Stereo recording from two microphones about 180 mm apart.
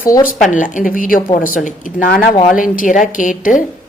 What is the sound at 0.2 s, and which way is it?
A woman's voice, 50° left (ahead or behind).